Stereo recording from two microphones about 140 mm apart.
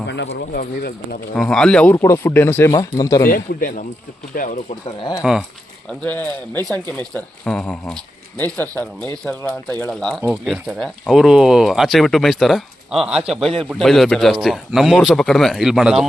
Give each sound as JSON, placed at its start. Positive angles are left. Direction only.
{"t": 0.5, "sound": "speech", "side_deg": 90}
{"t": 1.4, "sound": "speech", "side_deg": 5}
{"t": 3.2, "sound": "a man's voice", "side_deg": 85}
{"t": 4.9, "sound": "speech", "side_deg": 30}
{"t": 5.2, "sound": "speech", "side_deg": -5}
{"t": 6.0, "sound": "speech", "side_deg": 10}